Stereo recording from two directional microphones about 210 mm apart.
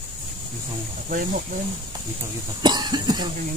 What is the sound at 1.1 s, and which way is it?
Speech, 40° right (ahead or behind).